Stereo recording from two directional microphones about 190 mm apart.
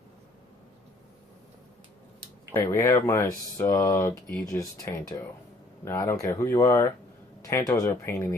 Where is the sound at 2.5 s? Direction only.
15° left (ahead or behind).